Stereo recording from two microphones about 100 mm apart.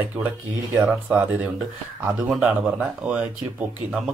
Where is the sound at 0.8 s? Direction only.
15° right (ahead or behind).